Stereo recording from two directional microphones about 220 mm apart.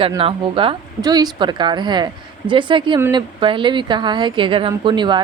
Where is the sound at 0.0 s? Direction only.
25° right (ahead or behind).